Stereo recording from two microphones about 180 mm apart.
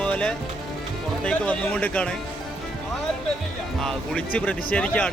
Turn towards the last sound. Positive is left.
turn(degrees=10)  # may be behind; listen again after turning